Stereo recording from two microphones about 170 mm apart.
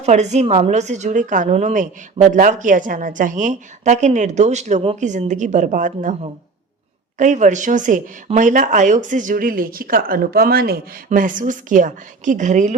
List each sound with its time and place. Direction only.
0.0 s a woman's voice: 45° right (ahead or behind)